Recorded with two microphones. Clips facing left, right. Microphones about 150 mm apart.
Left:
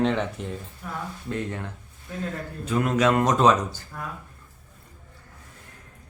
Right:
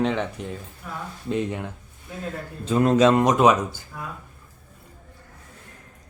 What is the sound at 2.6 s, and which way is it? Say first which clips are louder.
Speech: right 5 dB; 30° right (ahead or behind).